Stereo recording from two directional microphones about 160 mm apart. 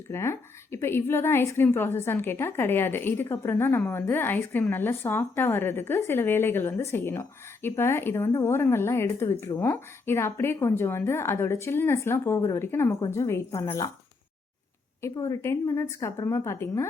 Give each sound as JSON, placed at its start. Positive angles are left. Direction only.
{"t": 0.1, "sound": "a woman's voice", "side_deg": 15}
{"t": 15.0, "sound": "a woman's voice", "side_deg": 20}